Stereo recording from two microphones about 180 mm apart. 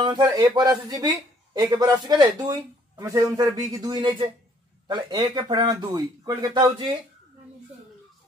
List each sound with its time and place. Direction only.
0.0 s a man's voice: 25° right (ahead or behind)